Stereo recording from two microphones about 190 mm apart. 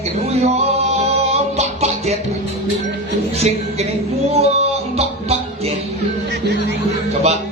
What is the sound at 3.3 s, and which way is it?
Music, 35° right (ahead or behind).